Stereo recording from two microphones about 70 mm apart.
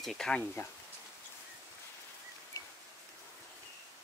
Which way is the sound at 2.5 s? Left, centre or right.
Left.